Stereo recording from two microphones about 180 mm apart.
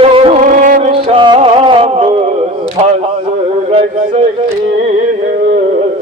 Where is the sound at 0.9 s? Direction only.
30° right (ahead or behind).